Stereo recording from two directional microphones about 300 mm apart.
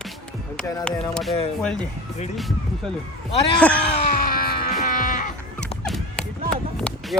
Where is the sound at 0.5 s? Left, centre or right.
Centre.